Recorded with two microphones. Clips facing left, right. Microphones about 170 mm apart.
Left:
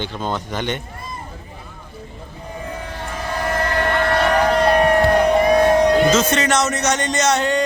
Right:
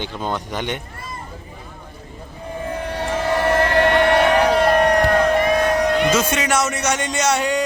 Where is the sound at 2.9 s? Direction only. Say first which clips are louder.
Right 8 dB; 70° right (ahead or behind).